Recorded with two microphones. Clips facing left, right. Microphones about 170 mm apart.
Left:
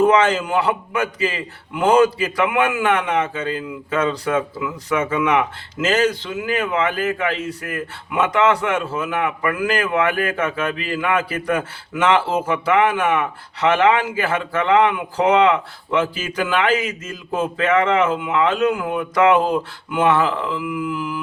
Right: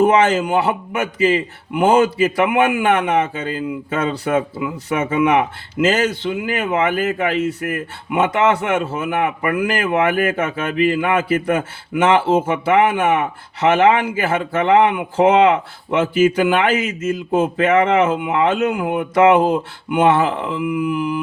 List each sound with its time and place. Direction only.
0.0 s a man's voice: 25° right (ahead or behind)